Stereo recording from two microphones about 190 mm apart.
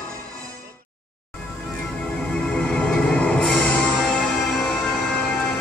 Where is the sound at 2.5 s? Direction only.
5° left (ahead or behind).